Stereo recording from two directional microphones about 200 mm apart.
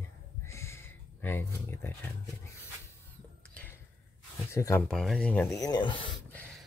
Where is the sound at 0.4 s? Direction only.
15° left (ahead or behind).